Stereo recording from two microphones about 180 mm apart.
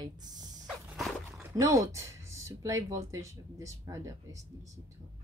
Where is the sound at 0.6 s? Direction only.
Centre (ahead or behind).